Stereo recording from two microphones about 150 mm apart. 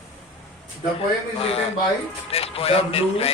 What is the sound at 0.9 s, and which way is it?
Speech, 40° left (ahead or behind).